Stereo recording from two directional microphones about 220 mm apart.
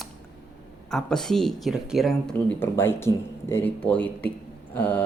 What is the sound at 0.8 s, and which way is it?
Speech, centre (ahead or behind).